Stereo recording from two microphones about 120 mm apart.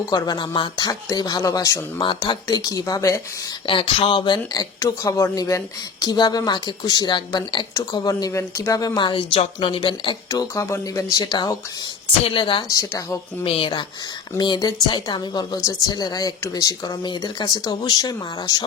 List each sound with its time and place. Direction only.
0.0 s speech: 35° left (ahead or behind)
2.0 s speech: 40° left (ahead or behind)
3.7 s speech: 50° left (ahead or behind)
10.5 s a woman's voice: 25° left (ahead or behind); by 12.7 s 45° left (ahead or behind)
12.7 s speech: 25° left (ahead or behind)
13.4 s a woman's voice: 50° left (ahead or behind); by 18.6 s 30° left (ahead or behind)